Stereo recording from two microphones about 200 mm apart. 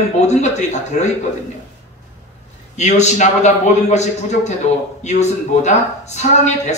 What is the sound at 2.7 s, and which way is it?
Speech, 35° left (ahead or behind).